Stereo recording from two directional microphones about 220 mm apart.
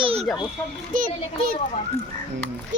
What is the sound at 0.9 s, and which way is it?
Speech, 35° right (ahead or behind).